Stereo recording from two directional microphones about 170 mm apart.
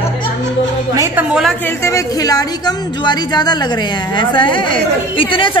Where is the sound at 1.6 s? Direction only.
15° left (ahead or behind); by 5.6 s 30° left (ahead or behind).